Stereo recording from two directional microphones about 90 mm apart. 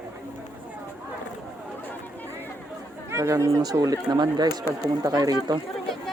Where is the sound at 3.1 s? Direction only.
30° right (ahead or behind).